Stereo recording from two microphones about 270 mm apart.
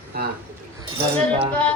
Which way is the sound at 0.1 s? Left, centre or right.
Right.